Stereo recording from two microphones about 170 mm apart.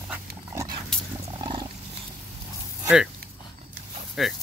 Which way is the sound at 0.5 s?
20° right (ahead or behind).